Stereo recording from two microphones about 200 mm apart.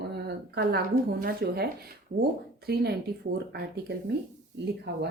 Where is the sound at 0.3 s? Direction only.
55° right (ahead or behind).